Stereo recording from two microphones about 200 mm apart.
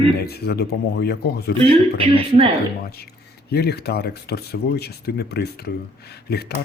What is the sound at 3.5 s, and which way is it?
Speech, 55° left (ahead or behind).